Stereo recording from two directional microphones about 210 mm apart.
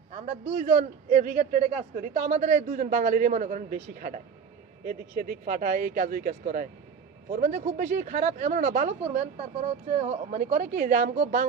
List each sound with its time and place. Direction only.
0.1 s speech: 30° right (ahead or behind)